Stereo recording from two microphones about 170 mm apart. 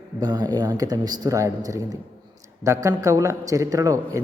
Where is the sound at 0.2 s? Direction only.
25° right (ahead or behind).